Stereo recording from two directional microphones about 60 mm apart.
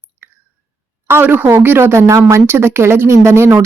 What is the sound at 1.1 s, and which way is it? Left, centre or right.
Speech, right.